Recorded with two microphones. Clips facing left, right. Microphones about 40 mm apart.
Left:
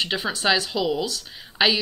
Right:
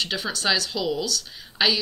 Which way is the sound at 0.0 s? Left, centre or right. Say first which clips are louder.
Left 2 dB; left.